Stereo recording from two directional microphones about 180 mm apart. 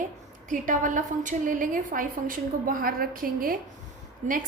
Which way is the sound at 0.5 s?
45° right (ahead or behind).